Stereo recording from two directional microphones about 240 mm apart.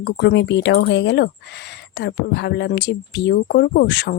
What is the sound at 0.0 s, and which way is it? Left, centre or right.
Speech, left.